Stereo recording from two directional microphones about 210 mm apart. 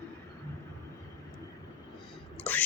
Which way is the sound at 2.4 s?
5° left (ahead or behind).